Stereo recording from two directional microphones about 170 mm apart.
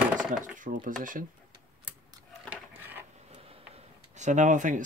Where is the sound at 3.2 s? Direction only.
35° right (ahead or behind).